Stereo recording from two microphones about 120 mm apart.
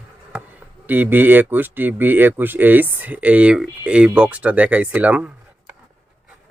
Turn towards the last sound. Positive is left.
turn(degrees=-10)  # may be behind; listen again after turning